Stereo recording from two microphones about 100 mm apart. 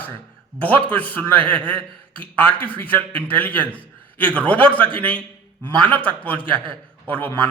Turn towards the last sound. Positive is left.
turn(degrees=15)  # may be behind; listen again after turning